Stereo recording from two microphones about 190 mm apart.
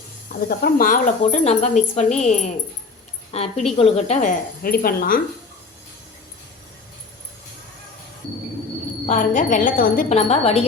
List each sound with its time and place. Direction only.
0.4 s a woman's voice: 50° left (ahead or behind)
9.0 s speech: 40° left (ahead or behind)